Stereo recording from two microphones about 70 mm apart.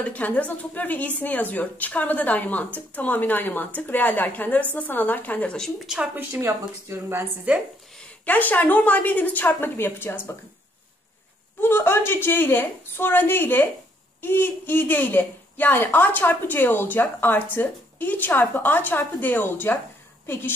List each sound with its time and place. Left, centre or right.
0.0 s a woman's voice: centre
5.9 s speech: centre
6.4 s speech: right
7.5 s speech: centre
8.3 s a woman's voice: left
11.6 s a woman's voice: left